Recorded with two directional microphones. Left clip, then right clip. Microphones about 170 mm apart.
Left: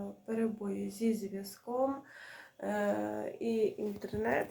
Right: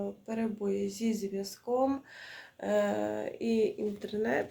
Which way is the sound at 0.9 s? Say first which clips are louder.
Right 1 dB; 20° right (ahead or behind).